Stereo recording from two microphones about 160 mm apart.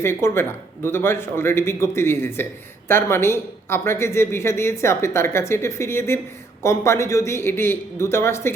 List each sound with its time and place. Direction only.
0.0 s speech: 15° left (ahead or behind)